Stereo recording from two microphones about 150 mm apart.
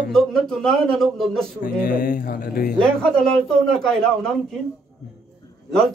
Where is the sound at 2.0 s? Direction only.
70° left (ahead or behind).